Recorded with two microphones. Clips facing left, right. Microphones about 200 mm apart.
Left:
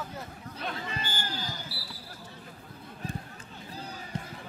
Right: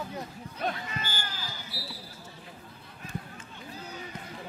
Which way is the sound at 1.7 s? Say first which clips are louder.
Right 2 dB; 30° left (ahead or behind).